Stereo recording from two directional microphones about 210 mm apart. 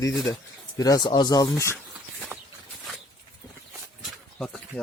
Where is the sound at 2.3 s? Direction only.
10° right (ahead or behind).